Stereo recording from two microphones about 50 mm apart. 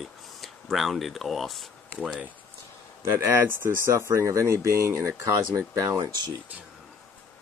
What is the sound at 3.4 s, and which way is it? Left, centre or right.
Speech, right.